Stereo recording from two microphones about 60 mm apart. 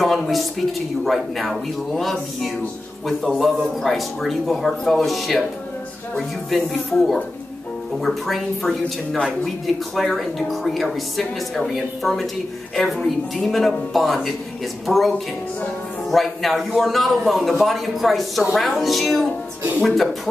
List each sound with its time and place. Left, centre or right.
0.0 s a woman's voice: centre